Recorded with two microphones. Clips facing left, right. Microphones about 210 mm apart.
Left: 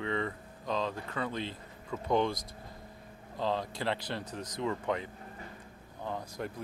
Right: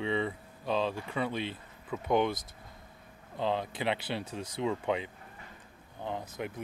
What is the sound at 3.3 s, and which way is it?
Speech, 20° right (ahead or behind).